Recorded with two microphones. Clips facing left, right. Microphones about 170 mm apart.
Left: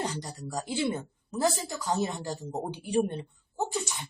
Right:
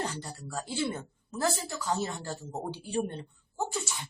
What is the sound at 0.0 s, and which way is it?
Speech, 15° left (ahead or behind).